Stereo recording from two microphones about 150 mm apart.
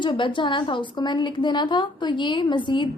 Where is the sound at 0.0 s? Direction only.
35° left (ahead or behind).